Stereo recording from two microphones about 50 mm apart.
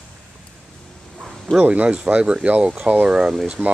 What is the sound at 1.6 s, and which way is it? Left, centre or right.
Speech, right.